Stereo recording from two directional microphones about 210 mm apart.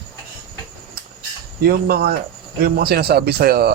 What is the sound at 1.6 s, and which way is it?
Speech, 45° right (ahead or behind).